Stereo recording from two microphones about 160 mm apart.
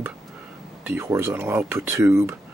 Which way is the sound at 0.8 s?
15° right (ahead or behind).